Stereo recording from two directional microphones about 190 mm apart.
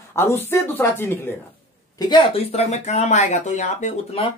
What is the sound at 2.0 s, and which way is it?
Speech, 25° left (ahead or behind).